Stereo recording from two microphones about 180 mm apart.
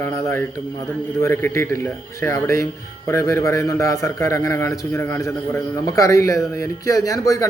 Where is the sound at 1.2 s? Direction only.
15° left (ahead or behind).